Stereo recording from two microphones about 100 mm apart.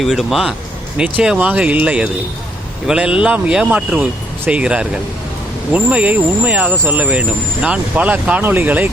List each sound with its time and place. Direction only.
0.0 s speech: centre (ahead or behind); by 8.9 s 15° right (ahead or behind)